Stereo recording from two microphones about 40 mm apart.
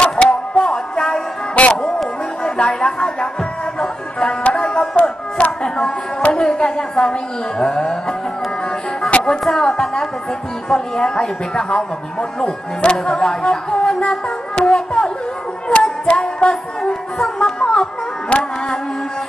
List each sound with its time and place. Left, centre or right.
0.0 s music: left
1.5 s a sound: left
2.4 s music: left
4.2 s music: left
4.7 s a sound: left
6.3 s a woman's voice: left
9.4 s a woman's voice: centre
14.6 s music: left